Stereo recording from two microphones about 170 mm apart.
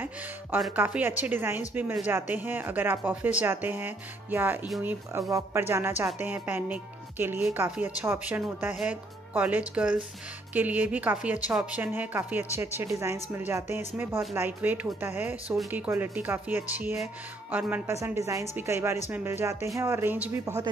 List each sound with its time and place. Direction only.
0.0 s speech: 5° right (ahead or behind)
4.6 s speech: centre (ahead or behind)
5.1 s speech: 15° right (ahead or behind)